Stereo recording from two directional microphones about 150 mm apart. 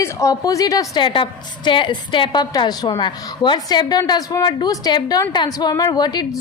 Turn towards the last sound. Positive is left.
turn(degrees=30)  # may be behind; listen again after turning